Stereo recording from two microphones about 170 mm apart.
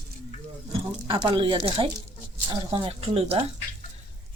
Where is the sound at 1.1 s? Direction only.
30° right (ahead or behind).